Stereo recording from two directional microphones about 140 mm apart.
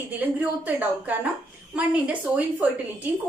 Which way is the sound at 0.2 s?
10° right (ahead or behind).